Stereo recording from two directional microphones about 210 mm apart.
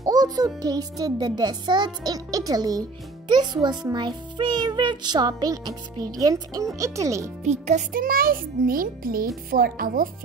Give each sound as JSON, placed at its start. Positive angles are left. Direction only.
{"t": 0.0, "sound": "music", "side_deg": -20}
{"t": 0.6, "sound": "a child's voice", "side_deg": -15}
{"t": 7.4, "sound": "a child's voice", "side_deg": -35}